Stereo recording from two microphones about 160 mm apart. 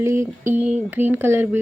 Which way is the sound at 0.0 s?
15° right (ahead or behind).